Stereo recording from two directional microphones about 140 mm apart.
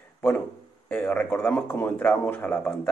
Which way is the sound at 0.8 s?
5° left (ahead or behind).